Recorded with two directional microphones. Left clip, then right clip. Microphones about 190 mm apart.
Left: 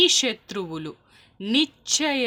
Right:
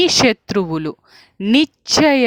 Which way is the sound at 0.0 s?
50° right (ahead or behind).